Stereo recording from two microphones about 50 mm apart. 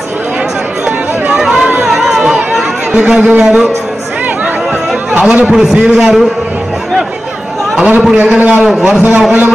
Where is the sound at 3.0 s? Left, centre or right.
Right.